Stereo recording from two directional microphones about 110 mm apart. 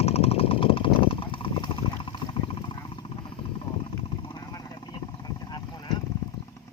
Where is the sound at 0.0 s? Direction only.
70° left (ahead or behind); by 2.6 s 50° left (ahead or behind).